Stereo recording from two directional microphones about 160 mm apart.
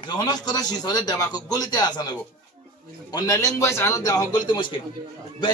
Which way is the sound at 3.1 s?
20° left (ahead or behind).